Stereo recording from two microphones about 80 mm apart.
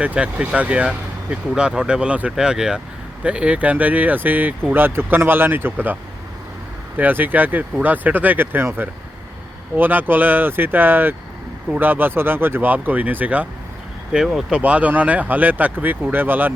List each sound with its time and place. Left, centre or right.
0.0 s speech: centre
14.1 s speech: centre
14.6 s speech: centre